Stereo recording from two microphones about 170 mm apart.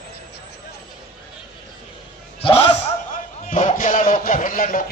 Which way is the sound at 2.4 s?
35° left (ahead or behind).